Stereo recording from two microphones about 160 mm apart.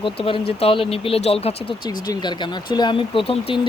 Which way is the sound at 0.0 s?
35° left (ahead or behind).